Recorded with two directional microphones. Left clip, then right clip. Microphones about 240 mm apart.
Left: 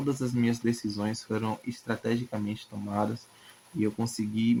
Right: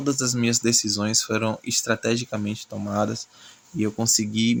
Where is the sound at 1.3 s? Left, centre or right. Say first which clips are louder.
Right 8 dB; right.